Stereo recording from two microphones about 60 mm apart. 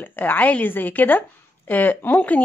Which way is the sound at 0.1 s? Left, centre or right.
Left.